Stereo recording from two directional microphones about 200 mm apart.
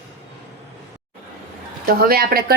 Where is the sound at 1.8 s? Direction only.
50° right (ahead or behind).